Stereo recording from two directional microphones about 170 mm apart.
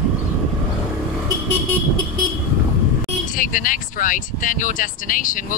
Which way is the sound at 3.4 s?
50° left (ahead or behind).